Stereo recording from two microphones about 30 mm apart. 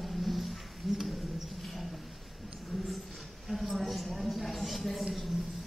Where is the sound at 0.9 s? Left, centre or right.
Centre.